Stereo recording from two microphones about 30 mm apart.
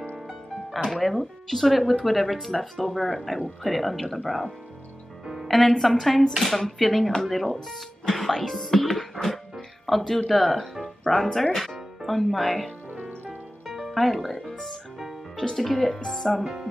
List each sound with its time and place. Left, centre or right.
0.7 s speech: centre
5.2 s music: centre
5.8 s speech: centre
8.5 s music: centre
9.8 s speech: centre
11.1 s speech: centre
13.7 s music: centre
13.9 s speech: centre
15.3 s speech: centre